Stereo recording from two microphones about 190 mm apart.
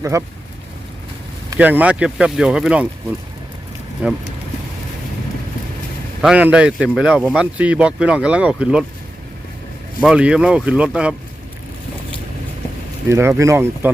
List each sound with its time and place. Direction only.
0.0 s speech: 15° right (ahead or behind)
1.5 s speech: 10° right (ahead or behind)
4.0 s speech: 10° right (ahead or behind)
6.2 s speech: 5° right (ahead or behind)
10.0 s speech: 5° right (ahead or behind)
13.1 s speech: 15° right (ahead or behind)